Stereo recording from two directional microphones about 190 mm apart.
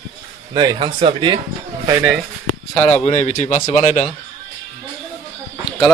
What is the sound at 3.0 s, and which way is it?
A man's voice, 35° left (ahead or behind).